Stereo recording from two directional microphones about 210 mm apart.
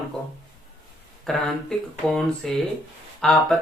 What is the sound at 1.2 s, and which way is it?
Speech, centre (ahead or behind).